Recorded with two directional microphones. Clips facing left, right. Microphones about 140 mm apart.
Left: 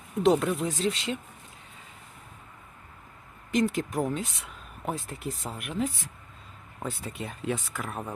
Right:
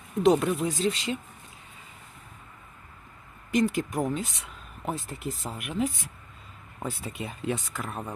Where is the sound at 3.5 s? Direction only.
Centre (ahead or behind).